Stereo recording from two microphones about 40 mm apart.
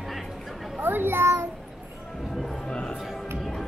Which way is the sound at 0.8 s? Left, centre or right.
Right.